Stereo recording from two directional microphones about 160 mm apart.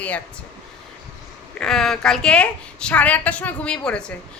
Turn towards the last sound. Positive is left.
turn(degrees=5)  # may be behind; listen again after turning